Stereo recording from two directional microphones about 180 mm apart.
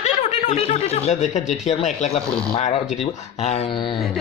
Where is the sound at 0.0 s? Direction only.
40° left (ahead or behind).